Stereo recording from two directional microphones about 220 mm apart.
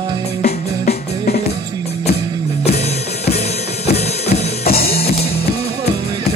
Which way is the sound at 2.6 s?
30° left (ahead or behind).